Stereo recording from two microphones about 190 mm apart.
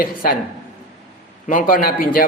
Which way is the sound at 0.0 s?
50° left (ahead or behind).